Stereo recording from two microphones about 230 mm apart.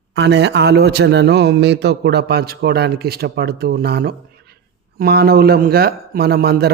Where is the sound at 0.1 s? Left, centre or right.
Right.